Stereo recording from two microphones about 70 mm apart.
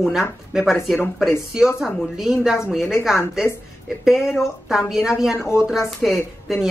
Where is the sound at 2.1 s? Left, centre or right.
Centre.